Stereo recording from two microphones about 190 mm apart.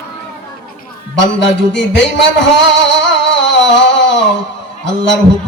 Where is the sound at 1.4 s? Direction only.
70° left (ahead or behind).